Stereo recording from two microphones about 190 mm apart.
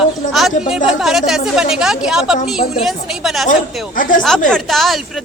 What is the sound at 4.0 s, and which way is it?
Speech, 45° left (ahead or behind).